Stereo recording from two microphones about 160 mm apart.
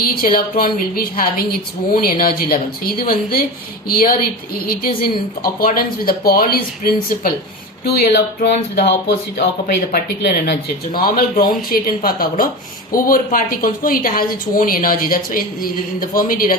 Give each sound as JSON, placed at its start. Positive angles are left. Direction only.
{"t": 0.0, "sound": "a woman's voice", "side_deg": 65}
{"t": 7.9, "sound": "a woman's voice", "side_deg": 80}